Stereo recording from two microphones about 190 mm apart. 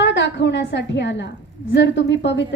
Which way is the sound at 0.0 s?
70° left (ahead or behind).